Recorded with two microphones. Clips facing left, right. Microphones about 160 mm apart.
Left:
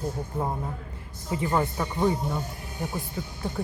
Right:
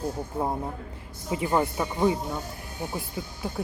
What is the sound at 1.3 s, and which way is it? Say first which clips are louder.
Speech: right 1 dB; 15° right (ahead or behind).